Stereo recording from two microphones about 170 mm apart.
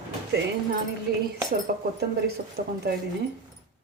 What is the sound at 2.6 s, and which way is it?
Speech, 65° right (ahead or behind).